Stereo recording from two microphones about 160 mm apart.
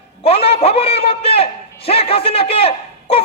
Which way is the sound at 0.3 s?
35° left (ahead or behind).